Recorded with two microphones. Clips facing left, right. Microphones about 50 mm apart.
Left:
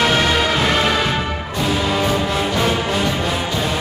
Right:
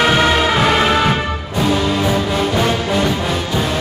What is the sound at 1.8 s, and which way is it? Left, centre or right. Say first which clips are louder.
Music: right 2 dB; centre.